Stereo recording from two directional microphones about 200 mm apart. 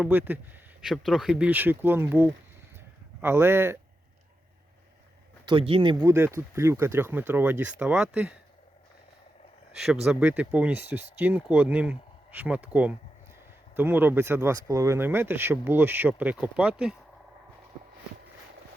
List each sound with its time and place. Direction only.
0.0 s speech: 10° right (ahead or behind)
5.5 s speech: 25° right (ahead or behind)
6.0 s speech: 10° right (ahead or behind)
9.8 s speech: centre (ahead or behind)